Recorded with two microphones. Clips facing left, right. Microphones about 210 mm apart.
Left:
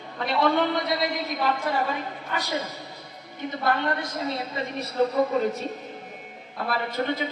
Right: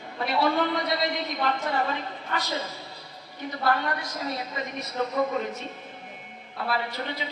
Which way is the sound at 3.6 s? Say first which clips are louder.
Left 1 dB; 25° left (ahead or behind).